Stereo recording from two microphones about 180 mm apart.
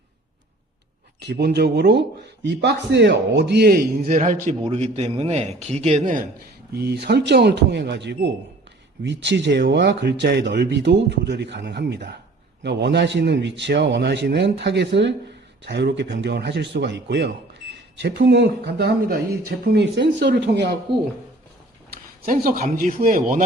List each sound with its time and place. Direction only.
1.2 s speech: 65° right (ahead or behind); by 6.2 s 40° right (ahead or behind)
6.7 s speech: 65° right (ahead or behind)
22.3 s speech: 50° right (ahead or behind)